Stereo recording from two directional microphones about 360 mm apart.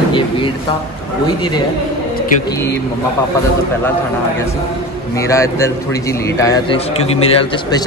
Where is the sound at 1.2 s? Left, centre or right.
Centre.